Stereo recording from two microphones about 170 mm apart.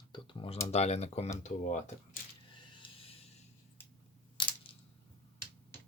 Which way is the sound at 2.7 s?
30° left (ahead or behind).